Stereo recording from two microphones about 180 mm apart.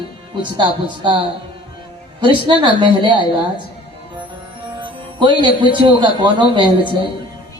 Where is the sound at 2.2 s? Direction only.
25° right (ahead or behind).